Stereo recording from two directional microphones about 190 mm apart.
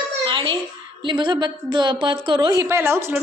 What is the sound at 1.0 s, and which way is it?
A woman's voice, 25° right (ahead or behind).